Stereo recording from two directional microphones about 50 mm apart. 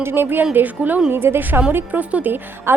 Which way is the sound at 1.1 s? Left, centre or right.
Right.